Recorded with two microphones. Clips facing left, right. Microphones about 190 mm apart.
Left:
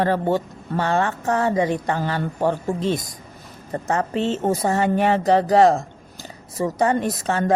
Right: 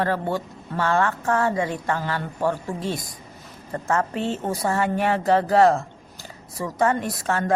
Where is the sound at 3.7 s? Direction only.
20° left (ahead or behind).